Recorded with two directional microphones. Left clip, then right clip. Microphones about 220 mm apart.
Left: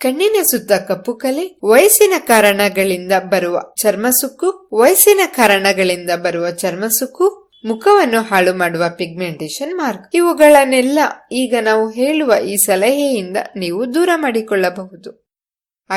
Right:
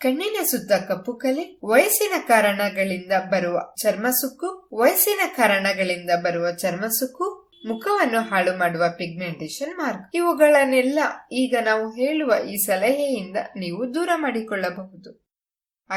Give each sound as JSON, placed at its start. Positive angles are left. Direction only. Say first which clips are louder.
{"t": 0.0, "sound": "speech", "louder": "left 9 dB", "side_deg": 35}